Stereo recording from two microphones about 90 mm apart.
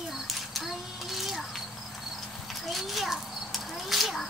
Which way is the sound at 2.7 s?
Centre (ahead or behind).